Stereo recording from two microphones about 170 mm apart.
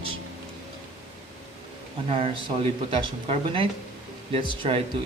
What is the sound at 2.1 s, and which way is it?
A man's voice, 30° right (ahead or behind).